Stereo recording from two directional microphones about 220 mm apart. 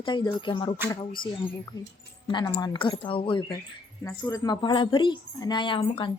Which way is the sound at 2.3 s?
20° left (ahead or behind).